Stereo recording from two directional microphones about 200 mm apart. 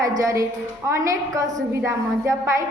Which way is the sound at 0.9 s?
15° right (ahead or behind).